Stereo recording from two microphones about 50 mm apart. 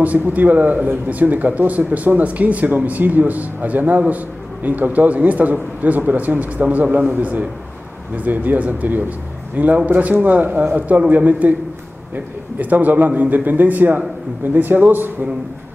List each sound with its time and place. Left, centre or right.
0.0 s speech: right
12.5 s speech: right